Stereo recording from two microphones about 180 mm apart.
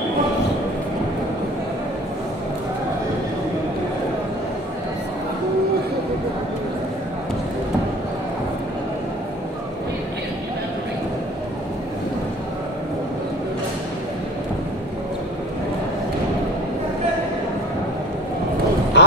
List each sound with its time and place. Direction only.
18.9 s vehicle: 70° left (ahead or behind)